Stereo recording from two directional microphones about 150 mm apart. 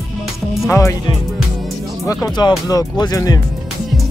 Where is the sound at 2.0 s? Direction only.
20° left (ahead or behind).